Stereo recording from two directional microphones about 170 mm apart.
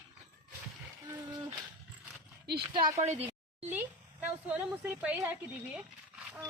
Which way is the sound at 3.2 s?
10° right (ahead or behind).